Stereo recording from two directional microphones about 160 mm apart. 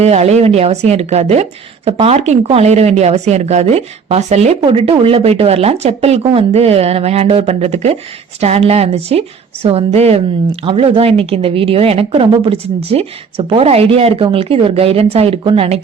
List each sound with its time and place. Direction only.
0.0 s a woman's voice: 40° right (ahead or behind)